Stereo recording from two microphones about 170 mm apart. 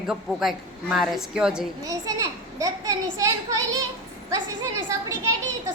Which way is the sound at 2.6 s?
20° right (ahead or behind).